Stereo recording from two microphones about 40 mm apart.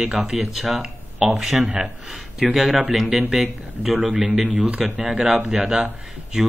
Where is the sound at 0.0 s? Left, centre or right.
Centre.